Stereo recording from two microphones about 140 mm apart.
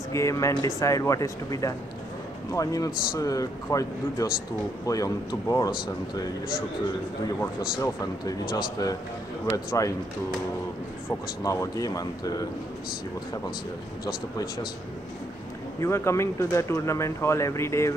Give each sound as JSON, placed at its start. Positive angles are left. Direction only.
{"t": 0.1, "sound": "speech", "side_deg": 20}
{"t": 7.8, "sound": "speech", "side_deg": 25}
{"t": 11.1, "sound": "speech", "side_deg": 20}
{"t": 14.0, "sound": "speech", "side_deg": 30}
{"t": 15.8, "sound": "speech", "side_deg": 20}